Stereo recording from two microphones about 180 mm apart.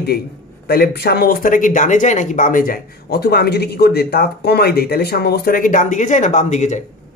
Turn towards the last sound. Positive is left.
turn(degrees=40)  # may be behind; listen again after turning